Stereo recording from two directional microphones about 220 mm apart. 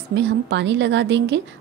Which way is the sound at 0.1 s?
55° right (ahead or behind).